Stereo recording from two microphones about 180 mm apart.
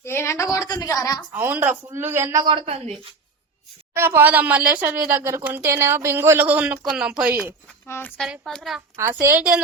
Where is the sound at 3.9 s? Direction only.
15° right (ahead or behind).